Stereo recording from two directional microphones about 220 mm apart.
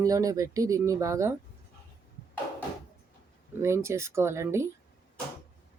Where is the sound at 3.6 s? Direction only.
10° right (ahead or behind).